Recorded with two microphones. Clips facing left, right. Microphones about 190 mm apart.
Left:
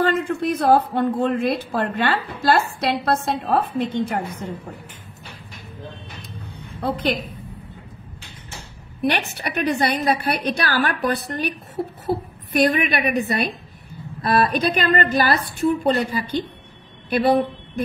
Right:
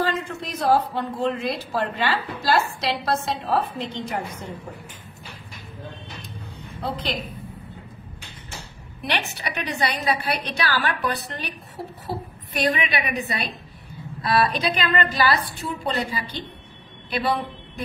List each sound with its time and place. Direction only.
0.0 s a woman's voice: 55° left (ahead or behind)
6.8 s speech: 55° left (ahead or behind)
9.0 s speech: 50° left (ahead or behind)
12.5 s speech: 50° left (ahead or behind)